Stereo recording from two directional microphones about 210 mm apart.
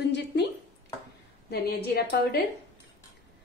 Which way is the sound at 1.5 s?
50° left (ahead or behind).